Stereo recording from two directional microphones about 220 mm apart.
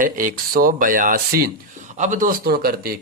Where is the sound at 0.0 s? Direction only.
40° right (ahead or behind).